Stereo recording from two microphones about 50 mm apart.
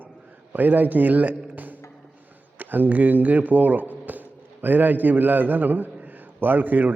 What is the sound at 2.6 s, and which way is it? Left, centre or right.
A man's voice, right.